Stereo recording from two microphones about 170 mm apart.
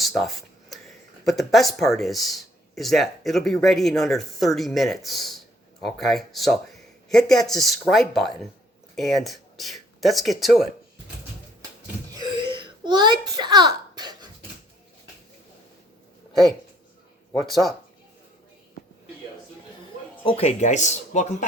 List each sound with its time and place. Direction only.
0.0 s speech: centre (ahead or behind)
12.1 s a sound: 25° right (ahead or behind)
20.2 s speech: 35° left (ahead or behind)